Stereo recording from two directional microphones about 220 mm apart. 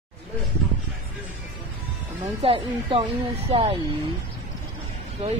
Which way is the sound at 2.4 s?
25° right (ahead or behind).